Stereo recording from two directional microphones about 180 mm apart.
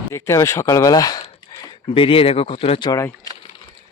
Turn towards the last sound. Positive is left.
turn(degrees=20)  # may be behind; listen again after turning